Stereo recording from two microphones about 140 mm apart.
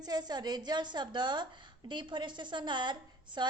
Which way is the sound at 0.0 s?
30° right (ahead or behind).